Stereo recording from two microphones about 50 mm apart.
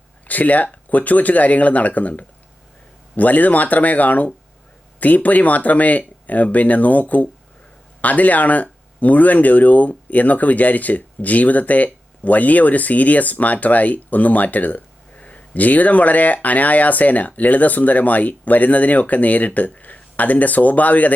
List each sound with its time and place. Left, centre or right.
0.3 s speech: left